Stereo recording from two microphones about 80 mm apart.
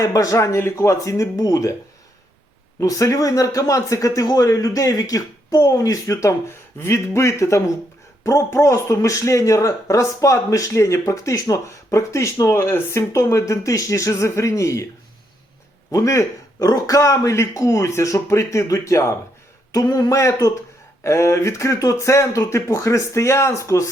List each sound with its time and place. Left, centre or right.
0.0 s speech: left
2.8 s speech: left
15.9 s speech: left
19.7 s speech: left